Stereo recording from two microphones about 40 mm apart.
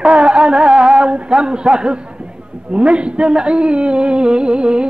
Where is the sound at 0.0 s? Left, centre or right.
Right.